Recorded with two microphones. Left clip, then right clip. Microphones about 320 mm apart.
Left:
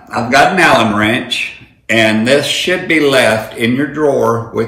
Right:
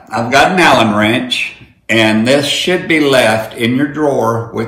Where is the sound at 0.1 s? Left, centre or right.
Centre.